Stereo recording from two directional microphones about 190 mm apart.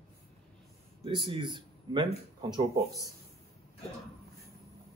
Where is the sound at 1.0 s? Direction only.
25° right (ahead or behind).